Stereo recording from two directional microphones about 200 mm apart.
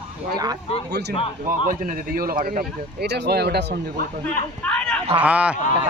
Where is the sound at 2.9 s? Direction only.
55° right (ahead or behind).